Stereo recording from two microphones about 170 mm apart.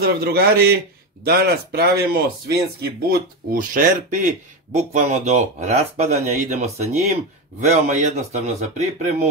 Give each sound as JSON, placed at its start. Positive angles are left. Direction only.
{"t": 0.0, "sound": "speech", "side_deg": -65}
{"t": 3.1, "sound": "speech", "side_deg": -50}